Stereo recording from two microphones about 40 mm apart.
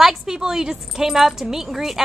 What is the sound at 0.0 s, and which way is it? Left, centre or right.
A woman's voice, centre.